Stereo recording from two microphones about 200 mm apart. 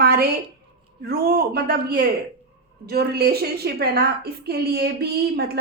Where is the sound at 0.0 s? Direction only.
50° right (ahead or behind).